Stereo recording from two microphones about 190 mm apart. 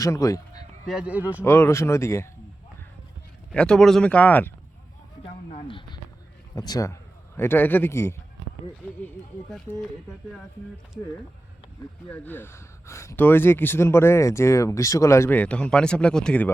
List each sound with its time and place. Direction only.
0.0 s speech: 15° left (ahead or behind)
0.9 s speech: 5° right (ahead or behind)
1.5 s speech: 15° left (ahead or behind)
3.5 s speech: 5° left (ahead or behind)
5.5 s a sound: 30° left (ahead or behind)
6.6 s a man's voice: 20° left (ahead or behind)
12.1 s speech: 10° left (ahead or behind)